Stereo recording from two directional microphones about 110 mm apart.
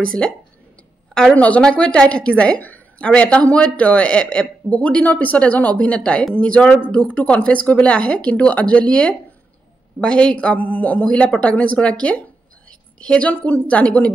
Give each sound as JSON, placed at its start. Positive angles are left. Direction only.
{"t": 0.2, "sound": "a woman's voice", "side_deg": 10}